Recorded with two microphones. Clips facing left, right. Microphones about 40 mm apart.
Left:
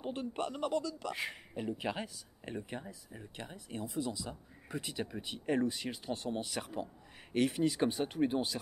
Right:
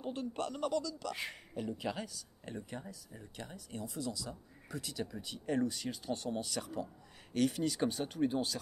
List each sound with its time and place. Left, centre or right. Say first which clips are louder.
0.0 s speech: left 1 dB; left
1.1 s speech: left 3 dB; centre
1.5 s speech: even; left